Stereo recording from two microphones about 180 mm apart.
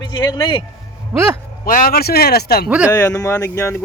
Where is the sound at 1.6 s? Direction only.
55° left (ahead or behind).